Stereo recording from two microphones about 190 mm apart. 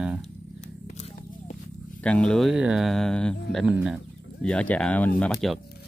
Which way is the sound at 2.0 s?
5° left (ahead or behind).